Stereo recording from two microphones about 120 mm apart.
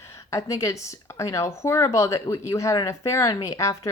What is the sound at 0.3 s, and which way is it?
Speech, 25° left (ahead or behind).